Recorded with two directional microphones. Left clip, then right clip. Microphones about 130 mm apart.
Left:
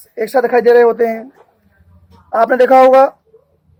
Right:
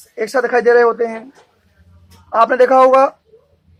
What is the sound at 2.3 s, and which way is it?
Speech, 80° left.